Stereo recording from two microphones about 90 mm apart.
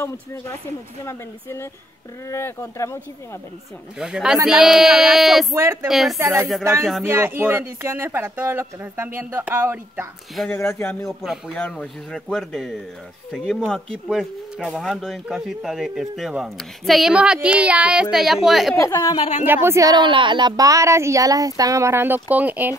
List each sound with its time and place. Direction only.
0.0 s speech: 30° left (ahead or behind)
4.0 s speech: 10° right (ahead or behind)
5.5 s speech: 30° right (ahead or behind)
5.9 s speech: centre (ahead or behind)
6.1 s speech: 35° right (ahead or behind)
6.8 s speech: centre (ahead or behind)
7.1 s speech: 25° right (ahead or behind)
10.5 s speech: 25° left (ahead or behind)
11.1 s speech: 5° right (ahead or behind)
11.5 s speech: 10° left (ahead or behind)
17.1 s speech: 10° right (ahead or behind)
18.8 s speech: 35° left (ahead or behind)
19.4 s speech: 25° right (ahead or behind)
19.9 s speech: 65° right (ahead or behind); by 22.8 s 20° right (ahead or behind)